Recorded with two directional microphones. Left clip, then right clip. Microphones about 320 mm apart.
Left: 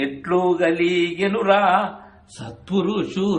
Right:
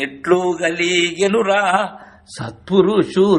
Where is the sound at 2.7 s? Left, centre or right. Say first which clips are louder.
Right 8 dB; centre.